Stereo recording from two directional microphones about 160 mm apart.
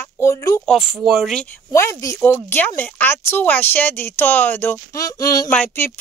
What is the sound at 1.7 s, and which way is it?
Speech, 15° left (ahead or behind).